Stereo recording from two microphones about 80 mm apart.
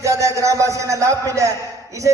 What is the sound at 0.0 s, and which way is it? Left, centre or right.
A man's voice, right.